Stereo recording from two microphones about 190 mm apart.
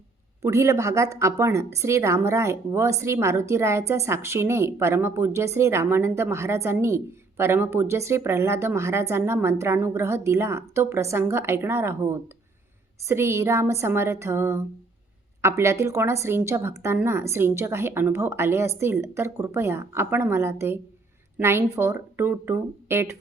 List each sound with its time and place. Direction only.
0.4 s speech: 15° right (ahead or behind)